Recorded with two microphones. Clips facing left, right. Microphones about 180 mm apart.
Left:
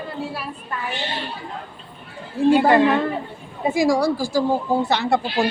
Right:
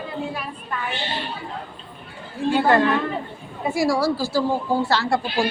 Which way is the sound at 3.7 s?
90° left.